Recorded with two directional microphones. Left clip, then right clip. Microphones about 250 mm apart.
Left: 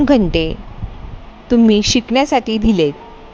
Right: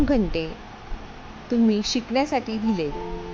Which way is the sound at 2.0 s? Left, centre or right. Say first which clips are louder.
Left 9 dB; left.